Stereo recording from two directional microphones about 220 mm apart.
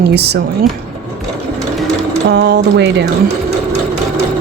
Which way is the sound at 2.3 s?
50° right (ahead or behind).